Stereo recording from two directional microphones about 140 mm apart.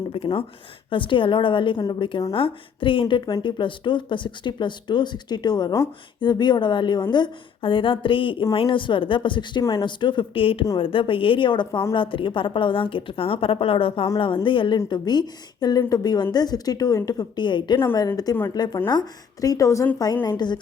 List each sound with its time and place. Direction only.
0.1 s a woman's voice: 40° left (ahead or behind)